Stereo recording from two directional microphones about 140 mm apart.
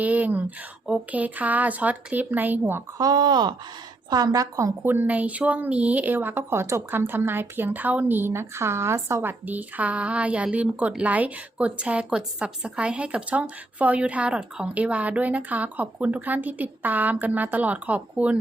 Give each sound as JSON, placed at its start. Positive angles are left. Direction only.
{"t": 0.0, "sound": "speech", "side_deg": -10}
{"t": 3.0, "sound": "speech", "side_deg": -30}